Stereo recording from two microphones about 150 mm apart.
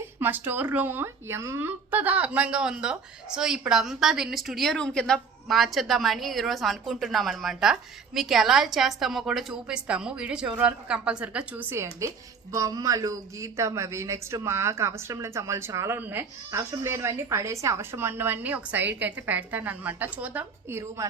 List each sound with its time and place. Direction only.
0.2 s a woman's voice: 15° right (ahead or behind)